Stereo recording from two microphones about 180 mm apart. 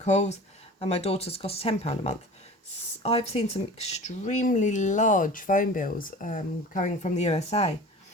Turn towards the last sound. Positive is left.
turn(degrees=35)  # may be behind; listen again after turning